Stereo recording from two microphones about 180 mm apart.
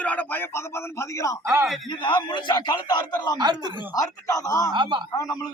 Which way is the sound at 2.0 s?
25° left (ahead or behind).